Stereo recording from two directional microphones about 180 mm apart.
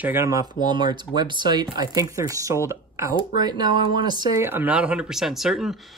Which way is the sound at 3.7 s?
55° left (ahead or behind).